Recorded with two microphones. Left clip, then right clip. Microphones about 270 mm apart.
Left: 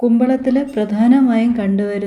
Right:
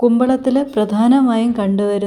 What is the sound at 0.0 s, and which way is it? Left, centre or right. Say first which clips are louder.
A woman's voice: right 1 dB; centre.